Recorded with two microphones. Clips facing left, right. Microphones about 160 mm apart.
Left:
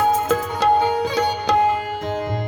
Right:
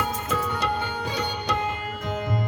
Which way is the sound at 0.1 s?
90° left.